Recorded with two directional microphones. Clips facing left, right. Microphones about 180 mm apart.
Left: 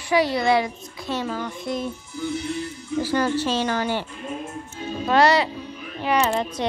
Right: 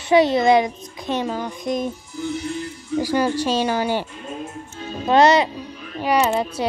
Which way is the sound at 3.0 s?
15° right (ahead or behind).